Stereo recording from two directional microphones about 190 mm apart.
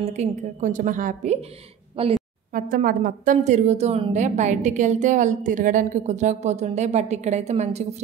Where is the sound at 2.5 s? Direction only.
45° right (ahead or behind).